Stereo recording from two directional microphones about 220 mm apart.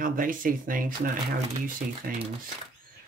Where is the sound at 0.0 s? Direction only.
40° right (ahead or behind).